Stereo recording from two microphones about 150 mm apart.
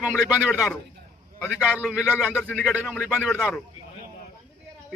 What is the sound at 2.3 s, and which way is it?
Speech, 5° left (ahead or behind).